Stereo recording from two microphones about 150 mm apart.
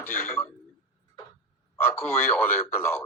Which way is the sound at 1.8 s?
15° left (ahead or behind).